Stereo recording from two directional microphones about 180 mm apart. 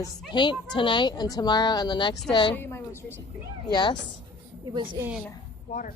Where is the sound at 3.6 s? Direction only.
25° left (ahead or behind).